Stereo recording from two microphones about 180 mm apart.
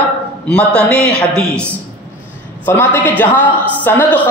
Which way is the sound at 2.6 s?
10° left (ahead or behind).